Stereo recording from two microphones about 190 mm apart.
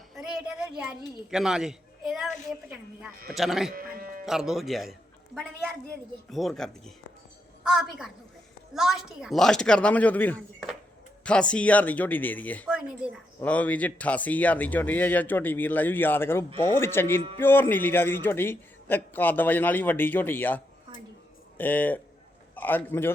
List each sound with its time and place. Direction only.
0.1 s a sound: centre (ahead or behind)
0.8 s a child's voice: 5° right (ahead or behind)
3.8 s speech: 50° right (ahead or behind)
4.3 s a child's voice: centre (ahead or behind)
21.6 s a man's voice: 10° left (ahead or behind)